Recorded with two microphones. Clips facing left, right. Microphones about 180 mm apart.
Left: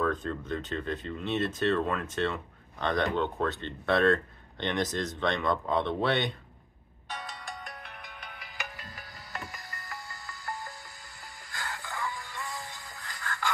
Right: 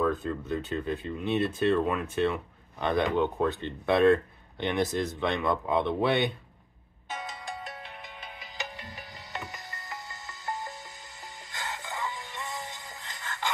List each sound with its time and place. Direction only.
0.0 s a sound: 5° right (ahead or behind)
0.5 s speech: 10° right (ahead or behind)
7.1 s ringtone: 20° right (ahead or behind)
11.5 s music: 20° right (ahead or behind)